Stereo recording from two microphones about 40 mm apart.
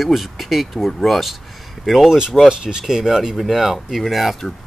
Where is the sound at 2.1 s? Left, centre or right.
Centre.